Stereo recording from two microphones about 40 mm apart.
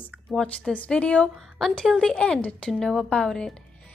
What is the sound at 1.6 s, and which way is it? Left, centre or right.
Speech, centre.